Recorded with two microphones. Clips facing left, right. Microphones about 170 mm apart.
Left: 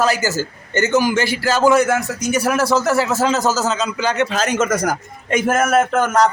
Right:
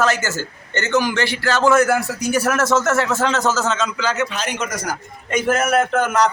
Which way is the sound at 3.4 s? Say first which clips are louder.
Left 1 dB; 40° left (ahead or behind).